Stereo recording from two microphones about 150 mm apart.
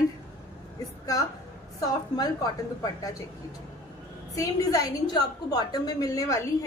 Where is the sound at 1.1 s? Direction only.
25° left (ahead or behind).